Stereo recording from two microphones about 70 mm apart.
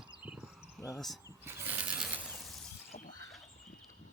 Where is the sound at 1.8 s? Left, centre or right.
Centre.